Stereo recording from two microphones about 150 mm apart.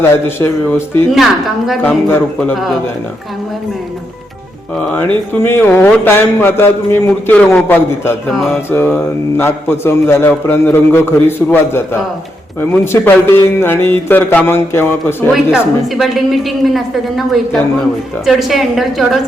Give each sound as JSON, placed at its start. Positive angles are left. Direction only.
{"t": 0.0, "sound": "speech", "side_deg": 15}
{"t": 1.1, "sound": "a woman's voice", "side_deg": 0}
{"t": 4.8, "sound": "speech", "side_deg": 10}
{"t": 15.5, "sound": "a woman's voice", "side_deg": 0}